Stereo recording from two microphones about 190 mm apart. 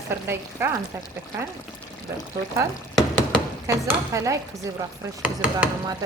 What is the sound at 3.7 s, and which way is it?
A woman's voice, 15° right (ahead or behind).